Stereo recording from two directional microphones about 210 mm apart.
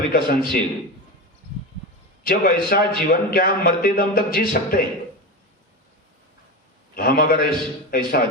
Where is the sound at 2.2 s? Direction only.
45° left (ahead or behind).